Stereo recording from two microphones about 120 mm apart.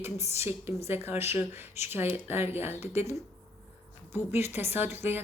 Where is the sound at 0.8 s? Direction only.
20° right (ahead or behind).